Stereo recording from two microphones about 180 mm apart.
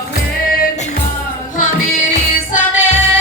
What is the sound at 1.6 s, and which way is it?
Music, 45° left (ahead or behind).